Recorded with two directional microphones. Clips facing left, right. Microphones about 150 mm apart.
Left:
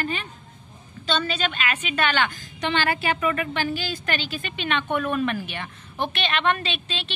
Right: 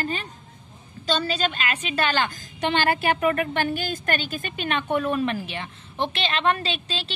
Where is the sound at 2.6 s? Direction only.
50° right (ahead or behind).